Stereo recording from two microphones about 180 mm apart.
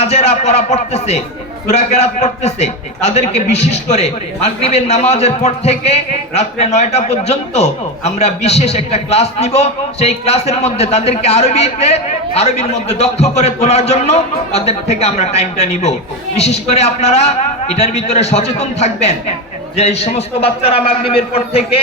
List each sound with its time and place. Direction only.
0.0 s a man's voice: 35° left (ahead or behind)